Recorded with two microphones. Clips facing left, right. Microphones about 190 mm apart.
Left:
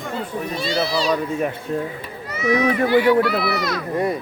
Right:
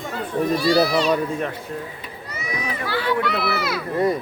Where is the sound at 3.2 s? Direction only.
Centre (ahead or behind).